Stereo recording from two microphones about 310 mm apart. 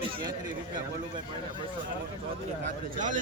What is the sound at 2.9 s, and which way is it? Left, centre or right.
Speech, right.